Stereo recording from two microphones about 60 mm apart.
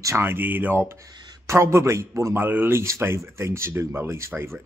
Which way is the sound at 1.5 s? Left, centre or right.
Right.